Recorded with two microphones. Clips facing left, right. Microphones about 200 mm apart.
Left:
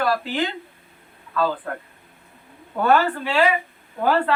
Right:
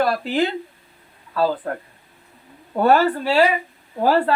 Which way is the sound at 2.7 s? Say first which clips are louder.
Right 3 dB; 35° right (ahead or behind).